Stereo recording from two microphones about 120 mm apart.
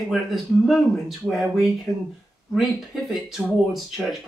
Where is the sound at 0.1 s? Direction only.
Centre (ahead or behind).